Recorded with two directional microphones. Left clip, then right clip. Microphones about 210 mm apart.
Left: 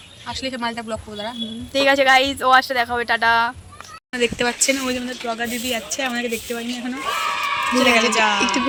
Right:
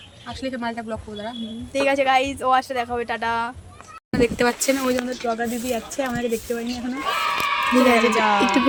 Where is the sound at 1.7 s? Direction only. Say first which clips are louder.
Left 4 dB; 5° left (ahead or behind).